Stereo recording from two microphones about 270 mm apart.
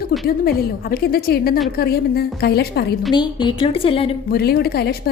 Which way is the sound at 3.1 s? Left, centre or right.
Centre.